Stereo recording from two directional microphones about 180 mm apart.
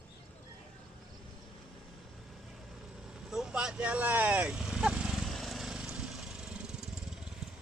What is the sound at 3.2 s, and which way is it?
Vehicle, 5° right (ahead or behind).